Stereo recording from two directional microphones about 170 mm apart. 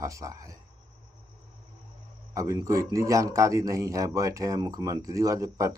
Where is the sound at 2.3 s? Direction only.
20° right (ahead or behind).